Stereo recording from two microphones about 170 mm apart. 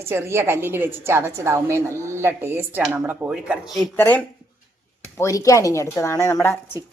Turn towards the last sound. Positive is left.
turn(degrees=15)  # may be behind; listen again after turning